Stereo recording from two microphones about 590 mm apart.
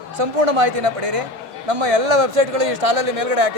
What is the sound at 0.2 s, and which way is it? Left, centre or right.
A man's voice, right.